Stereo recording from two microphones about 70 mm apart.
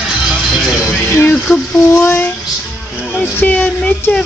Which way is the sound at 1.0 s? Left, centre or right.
Left.